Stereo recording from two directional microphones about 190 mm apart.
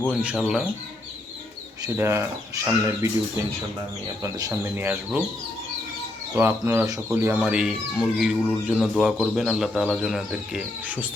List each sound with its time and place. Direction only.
0.1 s speech: 5° right (ahead or behind)
1.8 s speech: 15° right (ahead or behind)
4.2 s speech: 20° right (ahead or behind)
6.3 s speech: 10° right (ahead or behind)